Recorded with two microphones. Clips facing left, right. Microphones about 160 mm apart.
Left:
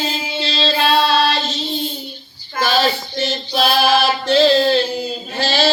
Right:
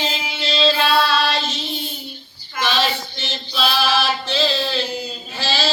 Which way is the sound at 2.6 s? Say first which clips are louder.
Left 4 dB; 40° left (ahead or behind).